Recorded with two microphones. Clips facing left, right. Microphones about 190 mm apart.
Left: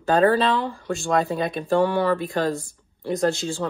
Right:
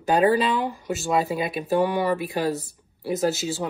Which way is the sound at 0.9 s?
5° right (ahead or behind).